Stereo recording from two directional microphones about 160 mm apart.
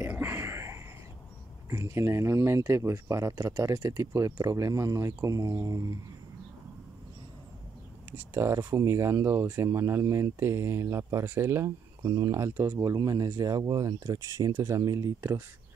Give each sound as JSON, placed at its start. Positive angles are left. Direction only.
{"t": 0.0, "sound": "whispering", "side_deg": -10}
{"t": 1.7, "sound": "speech", "side_deg": -15}
{"t": 8.4, "sound": "speech", "side_deg": -15}